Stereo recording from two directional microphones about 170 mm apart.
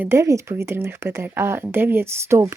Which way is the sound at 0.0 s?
15° right (ahead or behind).